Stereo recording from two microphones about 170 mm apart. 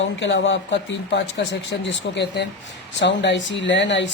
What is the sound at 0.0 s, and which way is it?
Speech, 90° left.